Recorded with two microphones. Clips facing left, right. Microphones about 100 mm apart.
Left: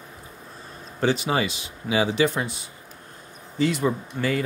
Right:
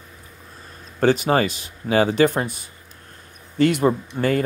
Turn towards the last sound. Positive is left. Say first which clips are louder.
# right 5 dB
turn(degrees=-50)  # may be behind; listen again after turning